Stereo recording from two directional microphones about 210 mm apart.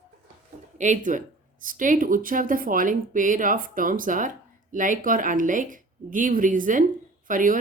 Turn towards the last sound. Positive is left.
turn(degrees=-40)  # may be behind; listen again after turning